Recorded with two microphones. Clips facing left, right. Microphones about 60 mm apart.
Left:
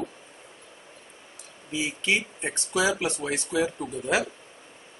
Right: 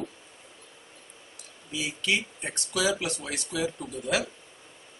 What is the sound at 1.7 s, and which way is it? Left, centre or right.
Speech, left.